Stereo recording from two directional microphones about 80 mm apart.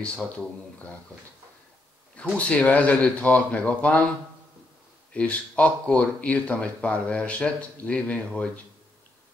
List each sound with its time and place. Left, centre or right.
2.3 s speech: centre
5.1 s speech: centre